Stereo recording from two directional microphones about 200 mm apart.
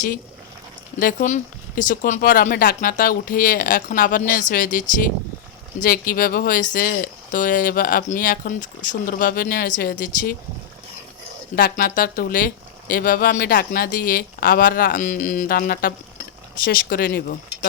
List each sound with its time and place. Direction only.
0.9 s speech: 40° left (ahead or behind)
11.5 s speech: 45° left (ahead or behind)